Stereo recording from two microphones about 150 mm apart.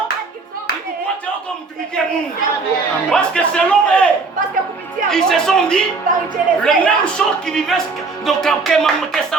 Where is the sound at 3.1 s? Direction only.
5° left (ahead or behind).